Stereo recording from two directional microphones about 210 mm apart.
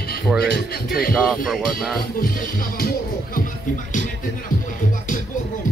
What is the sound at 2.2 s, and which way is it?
Speech, 40° left (ahead or behind).